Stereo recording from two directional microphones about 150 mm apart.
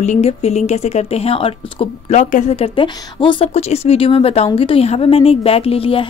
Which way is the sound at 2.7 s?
35° left (ahead or behind).